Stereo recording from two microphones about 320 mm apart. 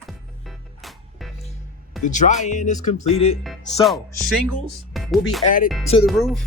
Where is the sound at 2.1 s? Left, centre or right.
Left.